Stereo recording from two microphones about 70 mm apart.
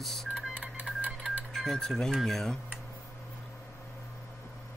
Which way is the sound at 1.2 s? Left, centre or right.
Centre.